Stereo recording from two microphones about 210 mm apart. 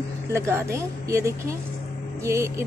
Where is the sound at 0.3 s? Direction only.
10° right (ahead or behind).